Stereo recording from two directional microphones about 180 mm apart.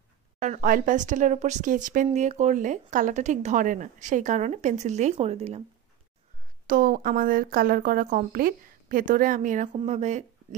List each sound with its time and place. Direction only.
0.4 s a woman's voice: 45° right (ahead or behind)
6.7 s a woman's voice: 50° right (ahead or behind)